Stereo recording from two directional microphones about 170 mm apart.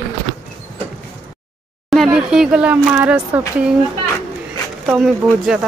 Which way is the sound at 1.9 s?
Centre (ahead or behind).